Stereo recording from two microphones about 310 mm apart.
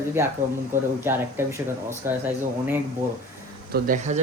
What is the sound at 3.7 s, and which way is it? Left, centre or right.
Speech, right.